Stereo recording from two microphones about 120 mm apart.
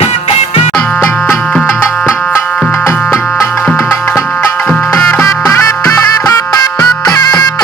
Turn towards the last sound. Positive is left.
turn(degrees=35)  # may be behind; listen again after turning